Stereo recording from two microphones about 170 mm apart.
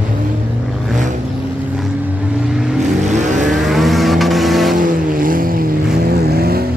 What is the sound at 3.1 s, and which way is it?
Vehicle, 45° right (ahead or behind).